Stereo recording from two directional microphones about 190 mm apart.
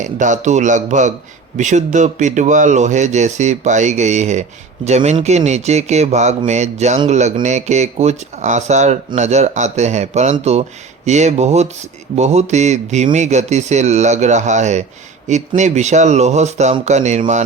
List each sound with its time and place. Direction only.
0.0 s speech: 40° right (ahead or behind)